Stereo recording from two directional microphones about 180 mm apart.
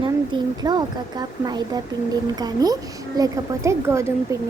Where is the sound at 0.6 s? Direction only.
25° right (ahead or behind).